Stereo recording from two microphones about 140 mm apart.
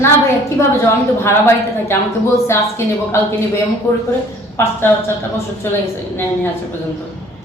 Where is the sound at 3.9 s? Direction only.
20° left (ahead or behind).